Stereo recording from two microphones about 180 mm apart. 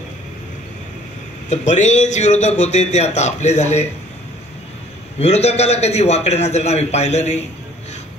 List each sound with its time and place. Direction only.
1.5 s a man's voice: 40° left (ahead or behind)
5.2 s a man's voice: 35° left (ahead or behind)